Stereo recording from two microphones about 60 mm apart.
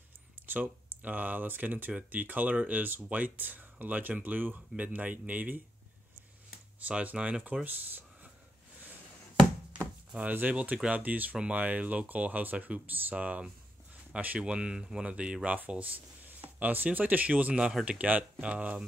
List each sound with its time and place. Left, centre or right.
0.5 s speech: right
6.9 s speech: centre
10.3 s speech: right